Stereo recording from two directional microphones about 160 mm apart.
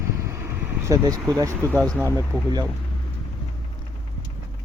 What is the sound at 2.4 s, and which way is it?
Speech, 25° right (ahead or behind).